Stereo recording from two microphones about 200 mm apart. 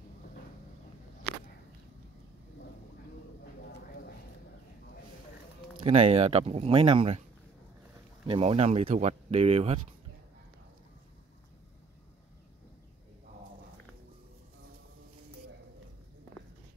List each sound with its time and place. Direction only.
5.8 s speech: 30° right (ahead or behind)
8.3 s speech: 30° right (ahead or behind)